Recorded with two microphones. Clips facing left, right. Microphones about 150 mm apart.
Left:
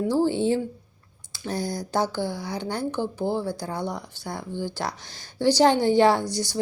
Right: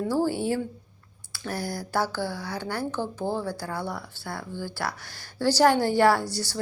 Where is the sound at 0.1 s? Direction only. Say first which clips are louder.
Left 4 dB; 20° left (ahead or behind).